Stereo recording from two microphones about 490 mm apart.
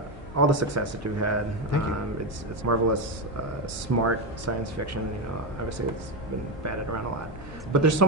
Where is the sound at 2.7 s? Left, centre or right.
Right.